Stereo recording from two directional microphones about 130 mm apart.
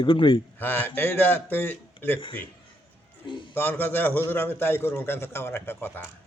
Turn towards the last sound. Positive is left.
turn(degrees=20)  # may be behind; listen again after turning